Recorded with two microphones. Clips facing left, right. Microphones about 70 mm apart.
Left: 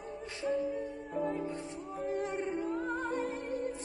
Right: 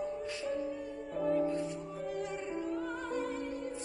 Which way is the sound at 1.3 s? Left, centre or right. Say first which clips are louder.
Right 6 dB; left.